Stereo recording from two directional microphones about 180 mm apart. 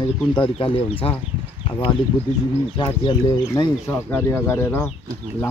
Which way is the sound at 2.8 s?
25° left (ahead or behind).